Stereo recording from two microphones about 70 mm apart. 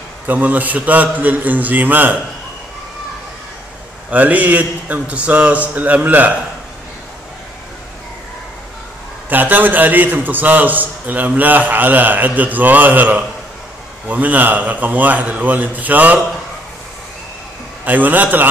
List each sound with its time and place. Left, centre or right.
0.3 s a man's voice: right
4.1 s a man's voice: right
9.3 s a man's voice: right
17.8 s a man's voice: right